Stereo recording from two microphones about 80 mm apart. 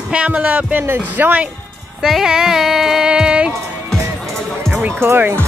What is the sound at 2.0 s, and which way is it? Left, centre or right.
Speech, centre.